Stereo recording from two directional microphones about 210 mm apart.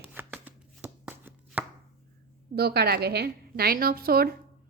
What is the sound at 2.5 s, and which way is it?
A woman's voice, 50° right (ahead or behind).